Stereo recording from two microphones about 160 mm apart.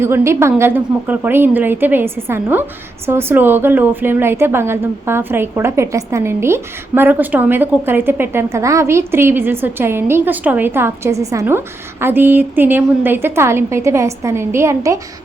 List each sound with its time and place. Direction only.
0.0 s a woman's voice: 15° right (ahead or behind)